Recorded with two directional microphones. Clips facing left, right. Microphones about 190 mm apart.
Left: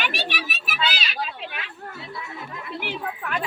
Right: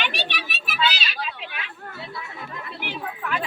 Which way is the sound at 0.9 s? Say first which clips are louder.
Left 1 dB; 40° left (ahead or behind).